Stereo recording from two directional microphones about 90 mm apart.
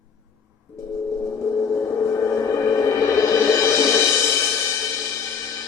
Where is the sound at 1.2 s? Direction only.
35° left (ahead or behind).